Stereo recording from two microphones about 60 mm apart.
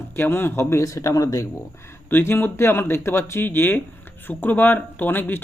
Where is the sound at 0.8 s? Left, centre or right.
Left.